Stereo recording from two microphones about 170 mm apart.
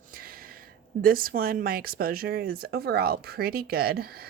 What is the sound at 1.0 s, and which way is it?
Speech, 60° right (ahead or behind).